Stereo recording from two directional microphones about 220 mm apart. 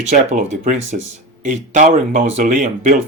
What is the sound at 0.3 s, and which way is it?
Speech, 35° right (ahead or behind).